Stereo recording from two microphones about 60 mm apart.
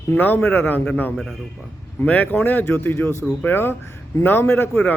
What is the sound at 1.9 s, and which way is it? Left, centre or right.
Speech, left.